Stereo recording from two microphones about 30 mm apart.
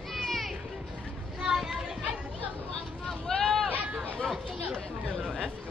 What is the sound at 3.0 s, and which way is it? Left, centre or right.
Vehicle, centre.